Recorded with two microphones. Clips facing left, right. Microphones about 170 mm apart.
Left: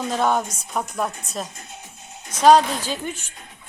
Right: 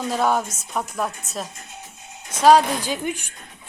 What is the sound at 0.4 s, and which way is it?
Speech, 25° right (ahead or behind).